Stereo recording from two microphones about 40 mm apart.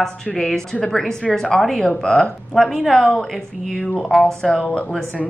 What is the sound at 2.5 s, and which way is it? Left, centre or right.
Speech, centre.